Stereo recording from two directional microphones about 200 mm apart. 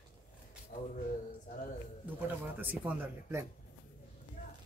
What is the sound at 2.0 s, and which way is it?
A woman's voice, 10° right (ahead or behind).